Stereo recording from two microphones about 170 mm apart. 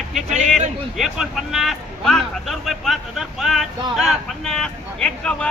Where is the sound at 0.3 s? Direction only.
45° right (ahead or behind).